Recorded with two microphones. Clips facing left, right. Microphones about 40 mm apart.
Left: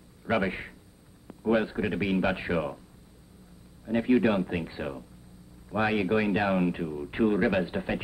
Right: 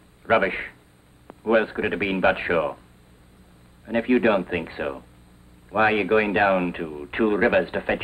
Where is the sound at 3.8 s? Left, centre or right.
Right.